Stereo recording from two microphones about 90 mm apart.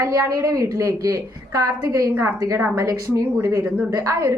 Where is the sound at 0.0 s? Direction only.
40° right (ahead or behind).